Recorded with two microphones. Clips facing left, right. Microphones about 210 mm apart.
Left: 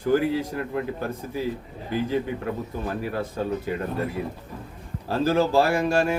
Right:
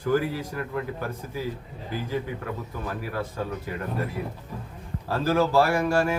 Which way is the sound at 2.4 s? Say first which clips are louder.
Left 4 dB; 25° left (ahead or behind).